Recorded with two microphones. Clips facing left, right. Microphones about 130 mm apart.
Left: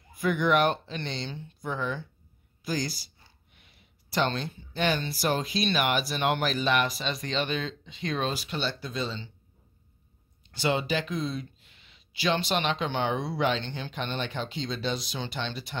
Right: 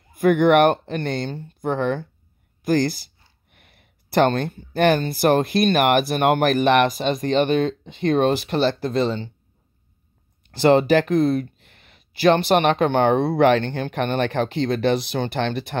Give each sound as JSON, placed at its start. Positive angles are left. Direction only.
{"t": 0.1, "sound": "speech", "side_deg": -55}
{"t": 10.6, "sound": "speech", "side_deg": -60}